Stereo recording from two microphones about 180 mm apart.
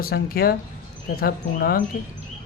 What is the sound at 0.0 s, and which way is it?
Speech, 55° left (ahead or behind).